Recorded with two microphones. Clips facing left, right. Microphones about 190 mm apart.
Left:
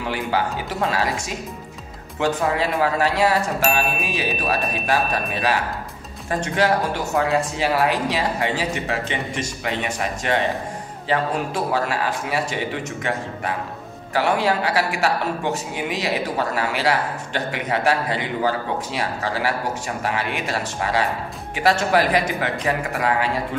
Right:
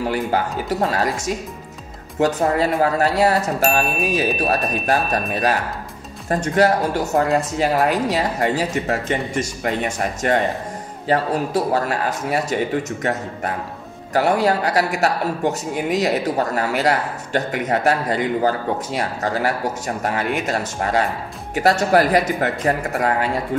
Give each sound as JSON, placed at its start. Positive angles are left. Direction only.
{"t": 0.0, "sound": "a man's voice", "side_deg": -45}